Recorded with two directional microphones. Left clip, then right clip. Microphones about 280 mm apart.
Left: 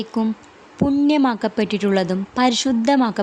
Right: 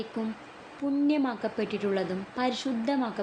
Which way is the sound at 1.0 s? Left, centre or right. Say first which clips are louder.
Left 9 dB; left.